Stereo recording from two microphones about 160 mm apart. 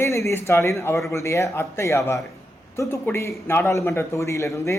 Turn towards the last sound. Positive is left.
turn(degrees=20)  # may be behind; listen again after turning